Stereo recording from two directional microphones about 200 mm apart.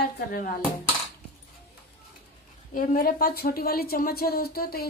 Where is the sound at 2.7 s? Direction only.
45° left (ahead or behind).